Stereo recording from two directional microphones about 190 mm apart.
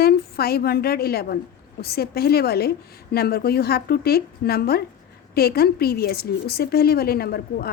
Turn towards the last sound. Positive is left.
turn(degrees=55)  # may be behind; listen again after turning